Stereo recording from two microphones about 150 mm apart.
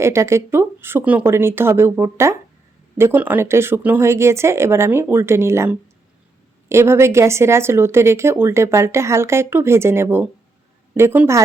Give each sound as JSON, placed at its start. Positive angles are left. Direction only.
{"t": 0.0, "sound": "speech", "side_deg": -20}